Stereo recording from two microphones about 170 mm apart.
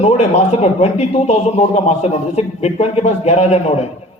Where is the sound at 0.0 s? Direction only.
40° left (ahead or behind).